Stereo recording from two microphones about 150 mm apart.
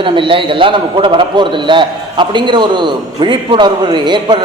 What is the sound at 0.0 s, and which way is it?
A man's voice, 35° right (ahead or behind).